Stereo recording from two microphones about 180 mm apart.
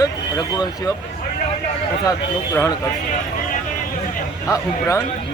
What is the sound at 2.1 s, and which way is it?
Speech, 15° left (ahead or behind).